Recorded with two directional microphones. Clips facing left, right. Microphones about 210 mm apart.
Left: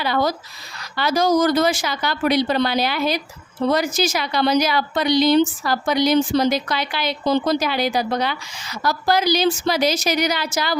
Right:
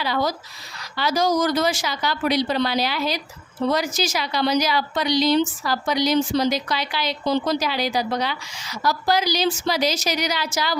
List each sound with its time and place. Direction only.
0.0 s a woman's voice: 55° left (ahead or behind)